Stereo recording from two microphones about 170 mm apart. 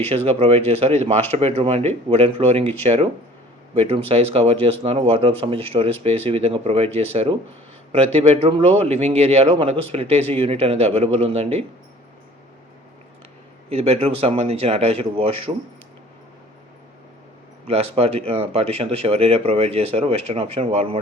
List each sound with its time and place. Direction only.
0.3 s speech: 35° right (ahead or behind)
13.7 s speech: 35° right (ahead or behind)
17.7 s speech: 35° right (ahead or behind)